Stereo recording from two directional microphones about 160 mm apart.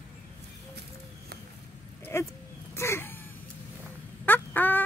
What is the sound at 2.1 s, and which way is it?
Speech, 15° left (ahead or behind).